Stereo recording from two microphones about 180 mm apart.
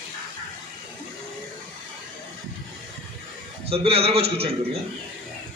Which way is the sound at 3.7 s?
30° right (ahead or behind).